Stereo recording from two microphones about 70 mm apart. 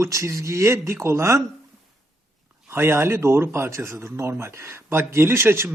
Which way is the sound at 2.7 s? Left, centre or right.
Right.